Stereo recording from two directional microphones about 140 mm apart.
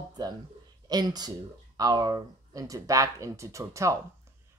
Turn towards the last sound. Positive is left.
turn(degrees=-20)  # may be behind; listen again after turning